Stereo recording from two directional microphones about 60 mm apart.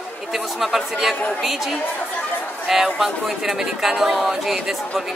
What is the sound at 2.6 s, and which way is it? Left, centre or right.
A woman's voice, centre.